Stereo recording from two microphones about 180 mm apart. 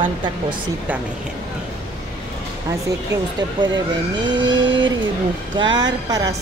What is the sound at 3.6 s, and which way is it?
Speech, 25° right (ahead or behind).